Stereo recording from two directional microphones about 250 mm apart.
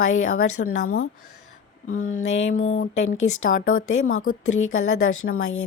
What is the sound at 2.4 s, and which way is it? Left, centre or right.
Speech, left.